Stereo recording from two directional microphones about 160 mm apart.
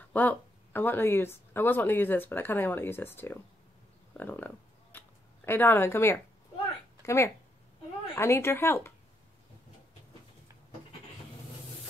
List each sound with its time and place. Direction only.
0.1 s speech: 10° left (ahead or behind)
4.9 s a sound: 10° left (ahead or behind)
7.1 s speech: 15° left (ahead or behind)